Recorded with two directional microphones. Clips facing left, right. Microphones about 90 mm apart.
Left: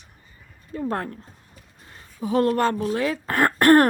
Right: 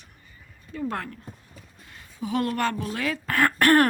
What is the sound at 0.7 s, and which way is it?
Speech, 30° left (ahead or behind).